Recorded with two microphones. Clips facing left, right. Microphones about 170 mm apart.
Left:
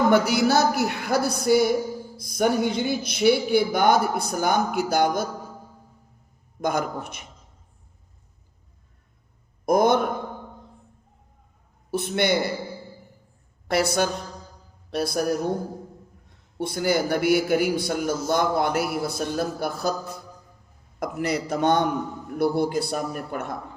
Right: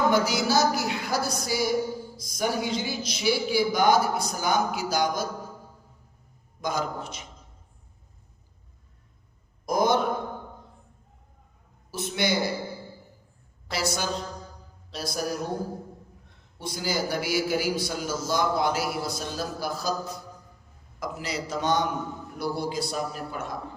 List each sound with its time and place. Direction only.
0.1 s a man's voice: 60° left (ahead or behind)
6.6 s a man's voice: 55° left (ahead or behind)
9.6 s a man's voice: 55° left (ahead or behind)
11.9 s a man's voice: 60° left (ahead or behind)
13.7 s a man's voice: 55° left (ahead or behind)
14.8 s a sound: 60° left (ahead or behind)
16.6 s a man's voice: 60° left (ahead or behind)